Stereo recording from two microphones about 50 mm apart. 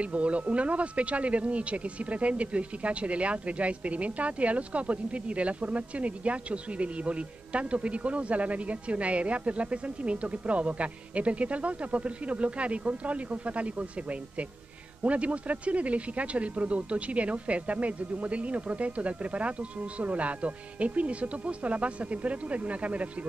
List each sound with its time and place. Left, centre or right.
0.0 s speech: right
15.0 s speech: right